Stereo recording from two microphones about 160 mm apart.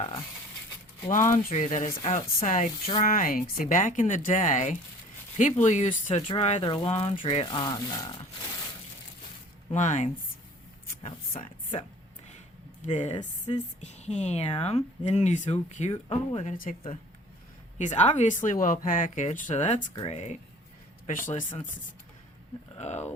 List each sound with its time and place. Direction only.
1.1 s speech: 55° left (ahead or behind)
3.0 s speech: 60° left (ahead or behind)
6.1 s speech: 35° left (ahead or behind)
7.4 s speech: 25° left (ahead or behind)
9.7 s speech: 50° left (ahead or behind)
11.3 s speech: 50° left (ahead or behind)
12.8 s speech: 45° left (ahead or behind)
17.7 s speech: 45° left (ahead or behind)
22.8 s speech: 45° left (ahead or behind)